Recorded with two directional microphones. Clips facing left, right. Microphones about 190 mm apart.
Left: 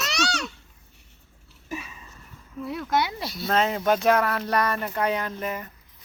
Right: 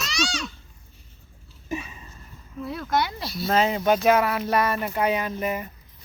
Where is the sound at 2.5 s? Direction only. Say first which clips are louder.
Even; 10° left (ahead or behind).